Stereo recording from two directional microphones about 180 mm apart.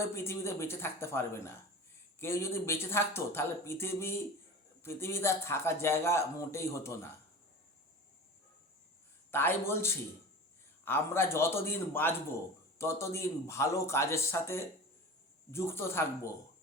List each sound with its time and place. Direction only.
0.0 s speech: 15° left (ahead or behind)
9.3 s speech: 10° left (ahead or behind)